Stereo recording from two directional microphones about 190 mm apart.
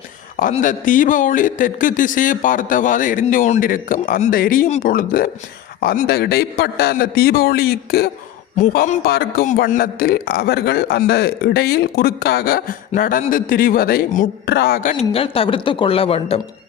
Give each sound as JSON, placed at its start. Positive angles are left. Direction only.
{"t": 0.5, "sound": "a man's voice", "side_deg": 45}
{"t": 14.4, "sound": "a man's voice", "side_deg": 60}
{"t": 15.1, "sound": "speech", "side_deg": 30}